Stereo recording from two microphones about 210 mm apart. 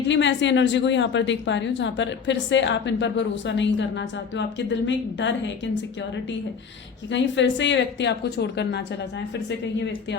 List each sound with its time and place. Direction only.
0.1 s speech: 60° left (ahead or behind)
7.1 s speech: 60° left (ahead or behind)